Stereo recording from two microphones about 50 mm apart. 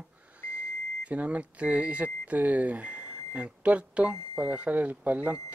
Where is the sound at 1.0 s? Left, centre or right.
Right.